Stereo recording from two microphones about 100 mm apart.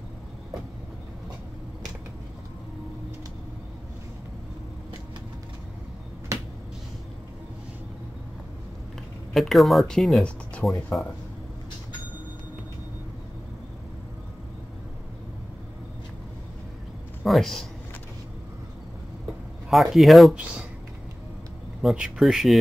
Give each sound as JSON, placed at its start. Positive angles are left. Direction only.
{"t": 6.3, "sound": "finger snapping", "side_deg": -30}
{"t": 9.3, "sound": "speech", "side_deg": 0}
{"t": 17.2, "sound": "a man's voice", "side_deg": 0}
{"t": 19.7, "sound": "speech", "side_deg": 0}
{"t": 21.9, "sound": "speech", "side_deg": -5}